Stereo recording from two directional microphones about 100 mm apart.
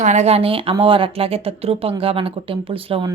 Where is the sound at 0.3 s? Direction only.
75° right (ahead or behind).